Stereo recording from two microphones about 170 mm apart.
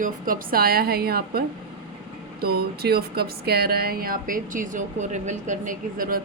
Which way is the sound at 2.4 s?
65° right (ahead or behind).